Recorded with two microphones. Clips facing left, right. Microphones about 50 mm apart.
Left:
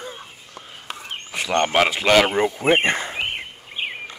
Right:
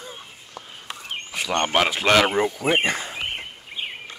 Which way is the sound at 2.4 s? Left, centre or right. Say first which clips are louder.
Left 3 dB; left.